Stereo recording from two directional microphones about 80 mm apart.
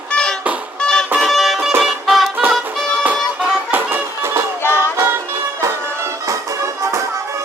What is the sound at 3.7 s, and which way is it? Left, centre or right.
Music, right.